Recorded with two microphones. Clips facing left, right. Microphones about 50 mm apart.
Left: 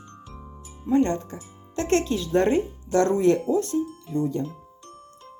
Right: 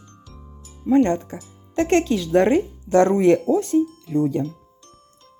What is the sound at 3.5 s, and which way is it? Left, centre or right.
Speech, right.